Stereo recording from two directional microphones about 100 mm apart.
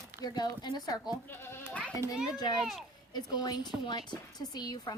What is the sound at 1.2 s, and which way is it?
Speech, 20° left (ahead or behind).